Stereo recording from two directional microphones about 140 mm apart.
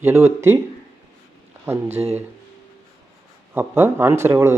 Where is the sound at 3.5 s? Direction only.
15° right (ahead or behind).